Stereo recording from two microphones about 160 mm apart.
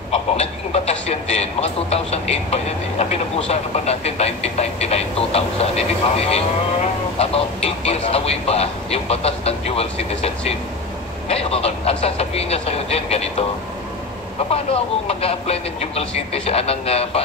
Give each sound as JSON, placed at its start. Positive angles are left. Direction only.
{"t": 0.1, "sound": "speech", "side_deg": 40}
{"t": 14.5, "sound": "speech", "side_deg": 40}